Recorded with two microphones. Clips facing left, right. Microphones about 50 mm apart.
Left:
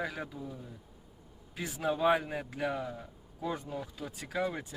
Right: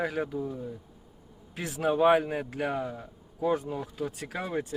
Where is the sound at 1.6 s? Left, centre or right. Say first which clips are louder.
Right 4 dB; centre.